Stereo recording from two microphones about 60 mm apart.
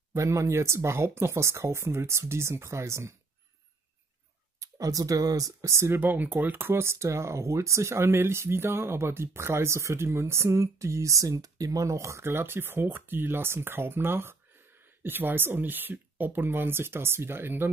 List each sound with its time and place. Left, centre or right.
0.1 s speech: right
4.6 s speech: right
5.9 s speech: right
12.3 s speech: right